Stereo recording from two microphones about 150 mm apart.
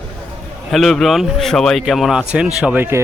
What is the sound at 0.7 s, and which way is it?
A man's voice, centre (ahead or behind).